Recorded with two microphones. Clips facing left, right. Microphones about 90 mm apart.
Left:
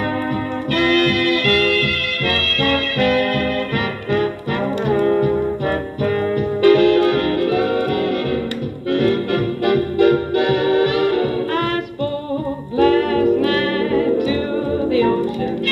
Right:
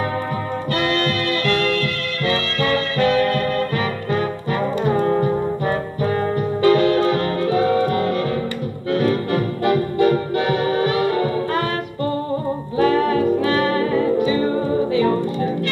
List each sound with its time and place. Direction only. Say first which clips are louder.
1.1 s music: left 3 dB; 55° left (ahead or behind)
5.0 s music: left 2 dB; 35° right (ahead or behind)
6.6 s music: left 3 dB; 60° left (ahead or behind)
8.9 s music: left 2 dB; 60° left (ahead or behind)
12.7 s music: left 2 dB; 60° left (ahead or behind)